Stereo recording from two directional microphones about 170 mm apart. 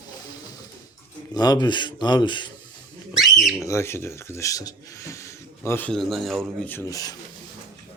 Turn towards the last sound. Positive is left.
turn(degrees=20)  # may be behind; listen again after turning